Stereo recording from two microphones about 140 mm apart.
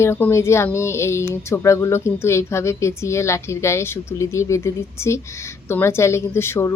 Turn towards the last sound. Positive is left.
turn(degrees=20)  # may be behind; listen again after turning